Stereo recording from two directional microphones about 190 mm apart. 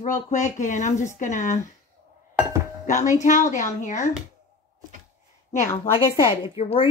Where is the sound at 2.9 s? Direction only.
40° left (ahead or behind).